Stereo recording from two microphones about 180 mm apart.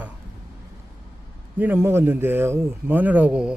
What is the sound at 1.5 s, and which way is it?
A man's voice, 10° right (ahead or behind).